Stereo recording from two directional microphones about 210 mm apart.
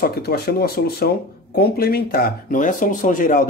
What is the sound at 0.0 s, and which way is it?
Speech, 45° left (ahead or behind).